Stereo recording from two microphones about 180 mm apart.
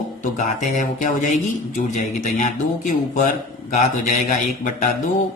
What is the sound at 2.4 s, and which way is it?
Speech, 45° left (ahead or behind).